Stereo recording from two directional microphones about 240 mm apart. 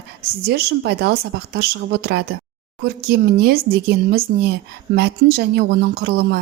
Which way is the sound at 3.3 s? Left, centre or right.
Right.